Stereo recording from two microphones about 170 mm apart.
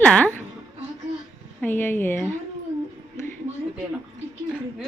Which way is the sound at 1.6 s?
10° left (ahead or behind).